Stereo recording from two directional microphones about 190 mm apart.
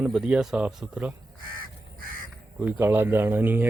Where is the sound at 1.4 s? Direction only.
50° right (ahead or behind).